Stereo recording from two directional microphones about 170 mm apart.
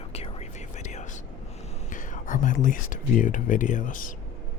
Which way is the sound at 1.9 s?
50° left (ahead or behind).